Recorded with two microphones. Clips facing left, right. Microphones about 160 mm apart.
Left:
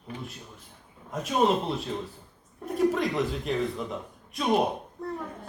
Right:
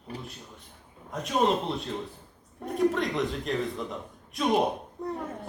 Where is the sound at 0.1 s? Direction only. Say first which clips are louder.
Left 1 dB; 35° right (ahead or behind).